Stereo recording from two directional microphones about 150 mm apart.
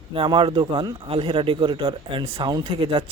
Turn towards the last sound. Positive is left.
turn(degrees=-40)  # may be behind; listen again after turning